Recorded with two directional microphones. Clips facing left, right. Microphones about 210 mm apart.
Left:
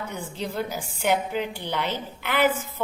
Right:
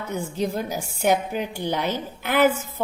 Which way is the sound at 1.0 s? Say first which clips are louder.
Right 2 dB; 45° right (ahead or behind).